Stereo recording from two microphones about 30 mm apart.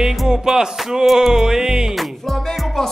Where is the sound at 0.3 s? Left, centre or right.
Right.